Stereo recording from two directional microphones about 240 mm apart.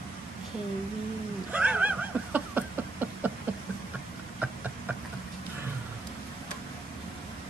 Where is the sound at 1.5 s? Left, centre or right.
Centre.